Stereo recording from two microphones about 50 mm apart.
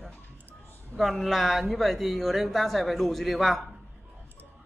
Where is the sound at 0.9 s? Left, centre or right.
Centre.